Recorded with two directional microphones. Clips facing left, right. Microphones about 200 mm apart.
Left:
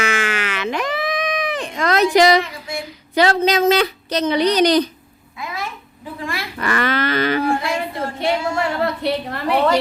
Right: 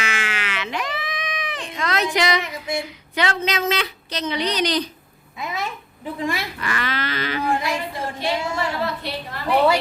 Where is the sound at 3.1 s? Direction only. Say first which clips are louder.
Left 7 dB; 40° left (ahead or behind).